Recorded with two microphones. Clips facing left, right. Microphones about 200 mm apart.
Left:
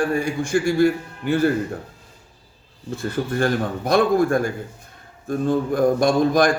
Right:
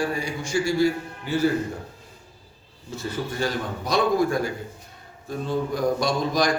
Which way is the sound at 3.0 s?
55° left (ahead or behind).